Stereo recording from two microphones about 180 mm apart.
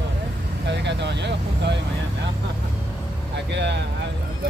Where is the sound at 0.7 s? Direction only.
75° right (ahead or behind).